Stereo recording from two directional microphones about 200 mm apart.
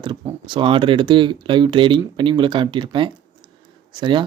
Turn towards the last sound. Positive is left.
turn(degrees=-25)  # may be behind; listen again after turning